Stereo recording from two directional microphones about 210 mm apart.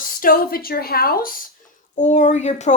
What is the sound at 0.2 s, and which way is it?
Speech, 45° left (ahead or behind).